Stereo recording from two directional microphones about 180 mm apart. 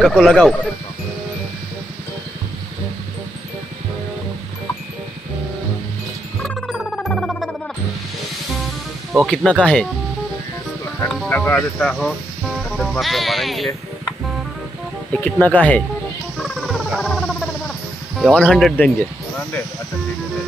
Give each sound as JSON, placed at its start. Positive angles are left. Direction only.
{"t": 0.0, "sound": "speech", "side_deg": 0}
{"t": 6.4, "sound": "music", "side_deg": -5}
{"t": 9.1, "sound": "speech", "side_deg": 0}
{"t": 11.2, "sound": "speech", "side_deg": 10}
{"t": 15.1, "sound": "speech", "side_deg": 5}
{"t": 16.5, "sound": "music", "side_deg": 0}
{"t": 18.2, "sound": "speech", "side_deg": 5}